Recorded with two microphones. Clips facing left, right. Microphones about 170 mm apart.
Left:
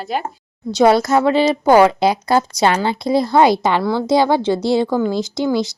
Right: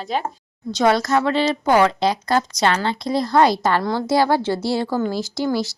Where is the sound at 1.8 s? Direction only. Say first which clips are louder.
Left 4 dB; 10° left (ahead or behind).